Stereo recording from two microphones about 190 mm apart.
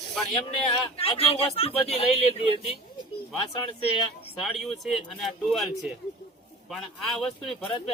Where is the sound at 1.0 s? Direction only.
30° left (ahead or behind).